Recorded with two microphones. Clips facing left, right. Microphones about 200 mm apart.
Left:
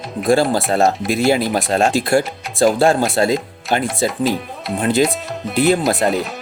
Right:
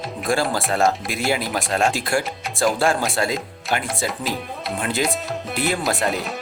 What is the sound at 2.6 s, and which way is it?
Speech, 35° left (ahead or behind).